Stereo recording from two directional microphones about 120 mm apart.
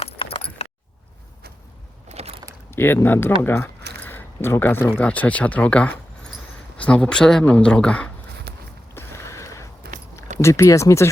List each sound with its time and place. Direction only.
0.0 s keys jangling: 50° left (ahead or behind)
2.0 s a sound: 60° right (ahead or behind)
2.6 s speech: 20° left (ahead or behind)
9.0 s mechanisms: 20° left (ahead or behind)
10.4 s speech: 25° left (ahead or behind)